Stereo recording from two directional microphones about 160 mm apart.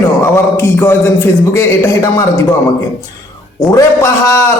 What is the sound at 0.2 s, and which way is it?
A man's voice, 15° left (ahead or behind).